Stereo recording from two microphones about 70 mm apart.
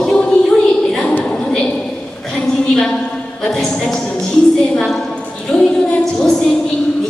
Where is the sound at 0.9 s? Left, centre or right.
Centre.